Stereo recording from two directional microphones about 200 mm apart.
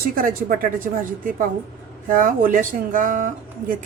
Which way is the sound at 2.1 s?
40° right (ahead or behind).